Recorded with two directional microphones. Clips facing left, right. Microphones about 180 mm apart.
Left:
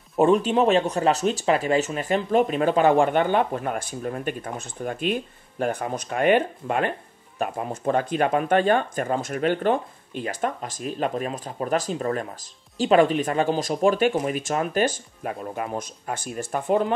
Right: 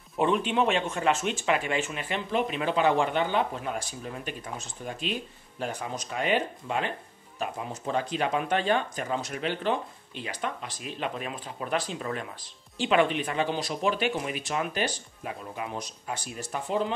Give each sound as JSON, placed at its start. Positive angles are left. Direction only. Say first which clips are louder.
{"t": 0.2, "sound": "speech", "louder": "left 6 dB", "side_deg": 40}